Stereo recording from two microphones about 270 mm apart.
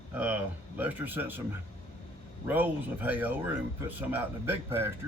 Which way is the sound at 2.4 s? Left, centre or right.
Centre.